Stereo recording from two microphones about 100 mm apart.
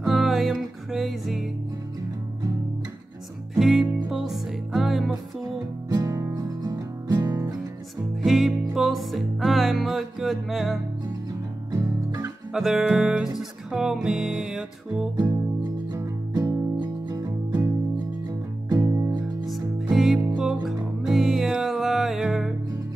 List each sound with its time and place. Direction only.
0.0 s music: 5° right (ahead or behind)
3.5 s music: 5° right (ahead or behind)
5.9 s music: 35° right (ahead or behind)
8.2 s music: centre (ahead or behind)
11.7 s music: 45° right (ahead or behind)
12.5 s music: 5° right (ahead or behind)
16.0 s music: 35° right (ahead or behind)
18.8 s music: 35° right (ahead or behind)
19.4 s music: centre (ahead or behind)